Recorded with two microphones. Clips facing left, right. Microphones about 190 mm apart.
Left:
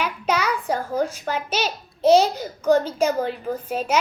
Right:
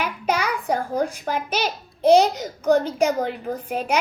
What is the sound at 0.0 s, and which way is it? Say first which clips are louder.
A child's voice: even; 10° right (ahead or behind).